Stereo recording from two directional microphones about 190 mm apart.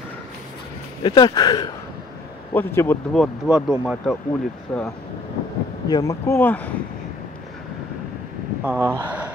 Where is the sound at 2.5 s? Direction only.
10° left (ahead or behind).